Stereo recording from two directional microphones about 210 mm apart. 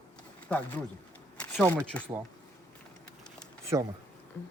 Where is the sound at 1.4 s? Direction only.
5° left (ahead or behind).